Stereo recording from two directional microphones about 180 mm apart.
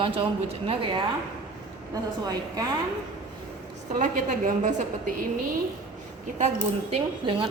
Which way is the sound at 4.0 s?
50° right (ahead or behind).